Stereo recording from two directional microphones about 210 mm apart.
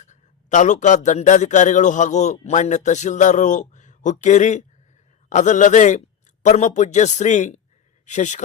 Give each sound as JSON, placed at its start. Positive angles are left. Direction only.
{"t": 0.0, "sound": "a man's voice", "side_deg": 35}